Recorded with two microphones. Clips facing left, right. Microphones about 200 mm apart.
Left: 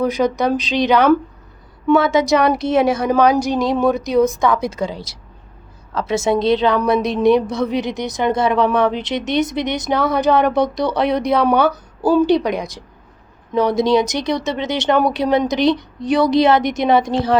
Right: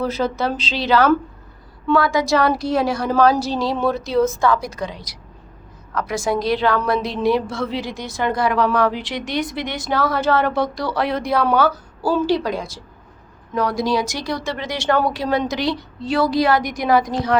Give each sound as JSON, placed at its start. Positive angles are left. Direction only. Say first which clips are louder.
{"t": 0.0, "sound": "a woman's voice", "louder": "left 4 dB", "side_deg": 15}